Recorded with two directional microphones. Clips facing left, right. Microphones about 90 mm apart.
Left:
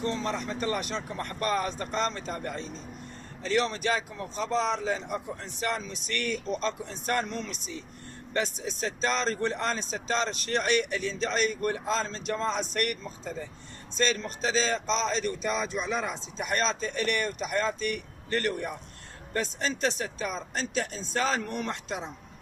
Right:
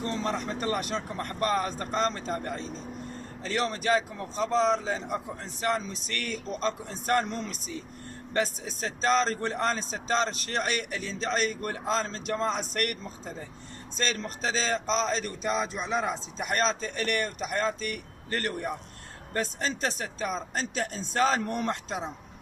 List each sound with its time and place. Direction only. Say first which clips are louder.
0.0 s speech: even; 35° right (ahead or behind)